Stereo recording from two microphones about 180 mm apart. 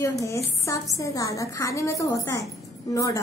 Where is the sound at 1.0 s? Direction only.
15° left (ahead or behind).